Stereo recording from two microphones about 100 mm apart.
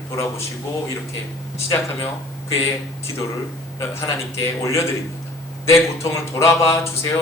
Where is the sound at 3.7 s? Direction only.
30° left (ahead or behind).